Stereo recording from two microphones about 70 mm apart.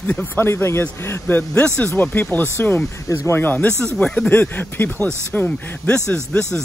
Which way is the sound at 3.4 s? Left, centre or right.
Left.